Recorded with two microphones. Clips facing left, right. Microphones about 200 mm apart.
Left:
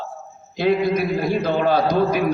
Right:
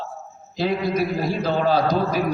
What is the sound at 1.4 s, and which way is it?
Speech, 55° left (ahead or behind).